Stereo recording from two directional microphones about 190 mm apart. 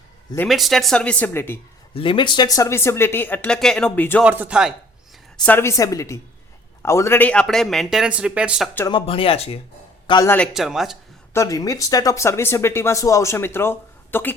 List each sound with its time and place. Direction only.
0.4 s a man's voice: centre (ahead or behind)
1.9 s speech: 30° left (ahead or behind); by 4.2 s 10° left (ahead or behind)
4.2 s a man's voice: 10° right (ahead or behind)
5.5 s a man's voice: 15° left (ahead or behind); by 8.7 s 5° right (ahead or behind)
8.9 s speech: 25° left (ahead or behind)
10.2 s a man's voice: 10° left (ahead or behind)
11.3 s speech: 20° left (ahead or behind)